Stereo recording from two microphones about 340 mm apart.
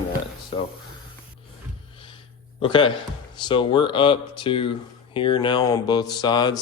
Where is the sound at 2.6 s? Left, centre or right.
Centre.